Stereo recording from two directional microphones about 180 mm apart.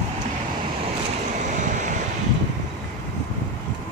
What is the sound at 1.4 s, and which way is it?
Waves, 45° right (ahead or behind).